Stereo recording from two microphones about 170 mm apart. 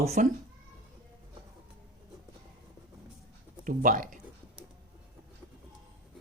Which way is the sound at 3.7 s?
50° right (ahead or behind).